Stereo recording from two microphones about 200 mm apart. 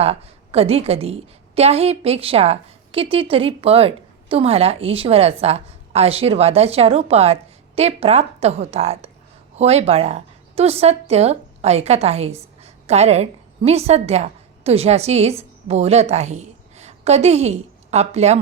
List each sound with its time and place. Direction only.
0.0 s a woman's voice: 30° right (ahead or behind)